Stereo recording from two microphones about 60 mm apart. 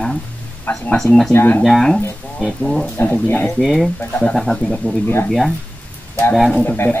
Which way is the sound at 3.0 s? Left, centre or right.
Left.